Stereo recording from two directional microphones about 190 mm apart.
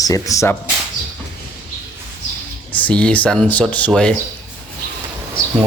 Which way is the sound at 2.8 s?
5° left (ahead or behind).